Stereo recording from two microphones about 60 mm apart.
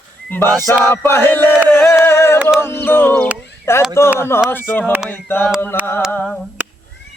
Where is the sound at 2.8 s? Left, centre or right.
Left.